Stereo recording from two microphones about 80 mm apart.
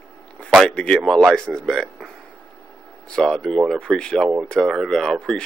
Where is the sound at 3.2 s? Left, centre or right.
Centre.